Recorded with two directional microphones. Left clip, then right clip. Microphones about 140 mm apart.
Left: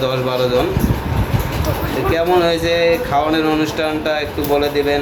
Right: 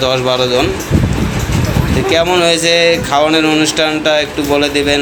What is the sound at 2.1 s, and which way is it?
Speech, 25° right (ahead or behind).